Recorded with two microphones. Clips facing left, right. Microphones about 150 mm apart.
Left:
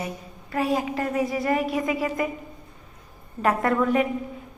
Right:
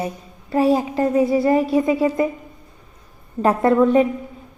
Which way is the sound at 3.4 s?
30° right (ahead or behind).